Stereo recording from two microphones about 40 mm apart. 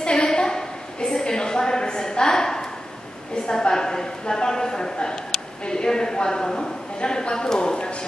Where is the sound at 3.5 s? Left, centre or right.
Centre.